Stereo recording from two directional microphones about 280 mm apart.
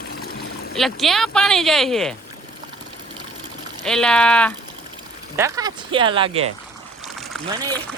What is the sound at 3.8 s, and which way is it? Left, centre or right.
Speech, centre.